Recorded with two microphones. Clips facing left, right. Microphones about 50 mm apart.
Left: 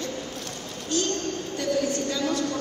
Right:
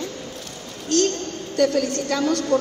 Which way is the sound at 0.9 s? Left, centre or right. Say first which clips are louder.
Right 6 dB; right.